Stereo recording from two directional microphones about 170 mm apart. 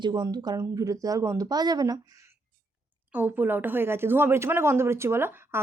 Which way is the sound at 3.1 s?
10° right (ahead or behind).